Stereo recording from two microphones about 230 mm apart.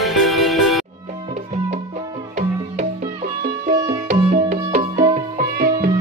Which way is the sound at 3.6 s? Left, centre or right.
Right.